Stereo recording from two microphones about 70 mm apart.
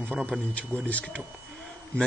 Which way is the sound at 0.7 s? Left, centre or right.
Right.